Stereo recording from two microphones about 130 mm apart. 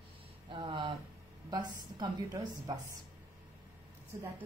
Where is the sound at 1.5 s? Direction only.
35° right (ahead or behind).